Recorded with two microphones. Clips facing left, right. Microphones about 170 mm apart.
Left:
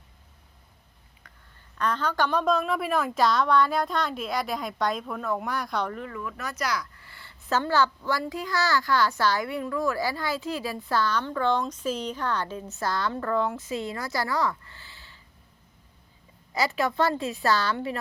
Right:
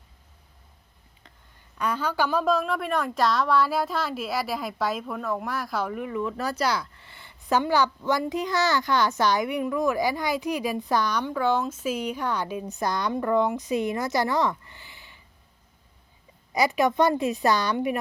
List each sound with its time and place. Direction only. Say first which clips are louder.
1.8 s a woman's voice: even; 10° right (ahead or behind)
16.5 s a woman's voice: right 4 dB; 15° right (ahead or behind)